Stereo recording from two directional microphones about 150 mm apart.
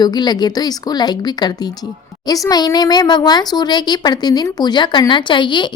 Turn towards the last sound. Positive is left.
turn(degrees=30)  # may be behind; listen again after turning